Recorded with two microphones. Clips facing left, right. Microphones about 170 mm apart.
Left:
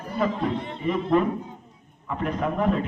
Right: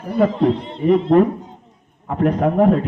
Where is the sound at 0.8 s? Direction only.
60° right (ahead or behind); by 2.8 s 45° right (ahead or behind).